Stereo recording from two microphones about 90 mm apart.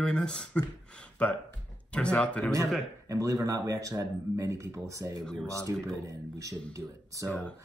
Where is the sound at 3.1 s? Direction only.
35° right (ahead or behind).